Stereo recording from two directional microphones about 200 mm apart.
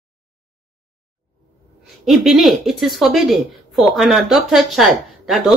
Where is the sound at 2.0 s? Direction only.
Centre (ahead or behind).